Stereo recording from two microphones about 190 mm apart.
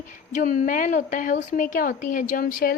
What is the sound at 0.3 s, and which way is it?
A woman's voice, 45° left (ahead or behind).